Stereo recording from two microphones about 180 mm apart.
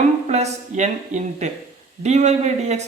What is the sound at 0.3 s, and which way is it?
Speech, 40° right (ahead or behind).